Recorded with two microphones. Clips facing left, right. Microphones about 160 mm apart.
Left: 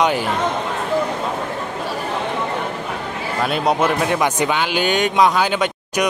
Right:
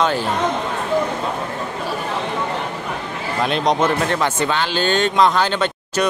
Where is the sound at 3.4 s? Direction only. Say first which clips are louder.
Even; 5° left (ahead or behind).